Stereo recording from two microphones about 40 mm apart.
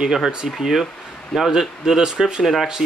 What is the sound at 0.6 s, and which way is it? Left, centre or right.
Speech, centre.